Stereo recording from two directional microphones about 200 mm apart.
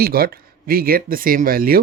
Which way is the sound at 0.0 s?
50° right (ahead or behind).